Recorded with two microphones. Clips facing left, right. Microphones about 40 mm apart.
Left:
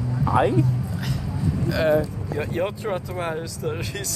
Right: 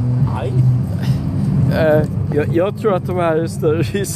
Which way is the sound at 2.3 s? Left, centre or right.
Centre.